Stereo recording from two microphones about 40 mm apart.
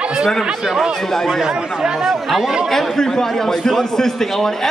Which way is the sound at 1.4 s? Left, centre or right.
Centre.